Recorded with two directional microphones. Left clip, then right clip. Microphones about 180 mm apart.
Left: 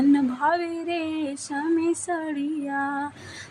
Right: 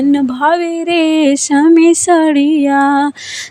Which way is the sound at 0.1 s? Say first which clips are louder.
Right 10 dB; 45° right (ahead or behind).